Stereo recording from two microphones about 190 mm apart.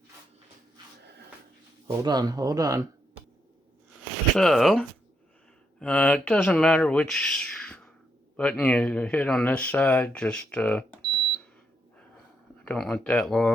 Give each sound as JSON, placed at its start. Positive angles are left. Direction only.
{"t": 2.0, "sound": "speech", "side_deg": -20}
{"t": 4.4, "sound": "speech", "side_deg": 0}
{"t": 12.6, "sound": "speech", "side_deg": 5}